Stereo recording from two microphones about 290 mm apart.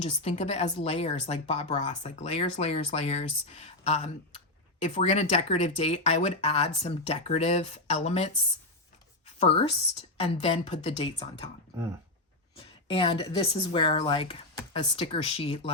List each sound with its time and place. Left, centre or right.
0.0 s speech: left
9.4 s speech: left
12.5 s speech: centre